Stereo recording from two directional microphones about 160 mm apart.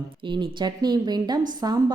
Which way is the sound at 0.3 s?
25° right (ahead or behind).